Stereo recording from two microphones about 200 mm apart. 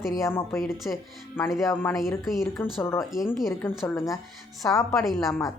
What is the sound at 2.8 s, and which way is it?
Speech, 10° left (ahead or behind).